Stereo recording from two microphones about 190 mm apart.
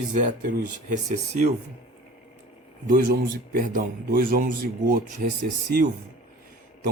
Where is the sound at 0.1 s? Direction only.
45° right (ahead or behind).